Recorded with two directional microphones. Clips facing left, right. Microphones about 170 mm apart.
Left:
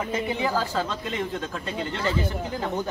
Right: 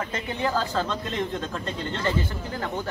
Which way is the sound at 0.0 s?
10° left (ahead or behind).